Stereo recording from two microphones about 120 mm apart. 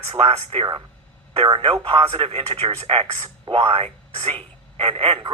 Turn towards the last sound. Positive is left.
turn(degrees=-45)  # may be behind; listen again after turning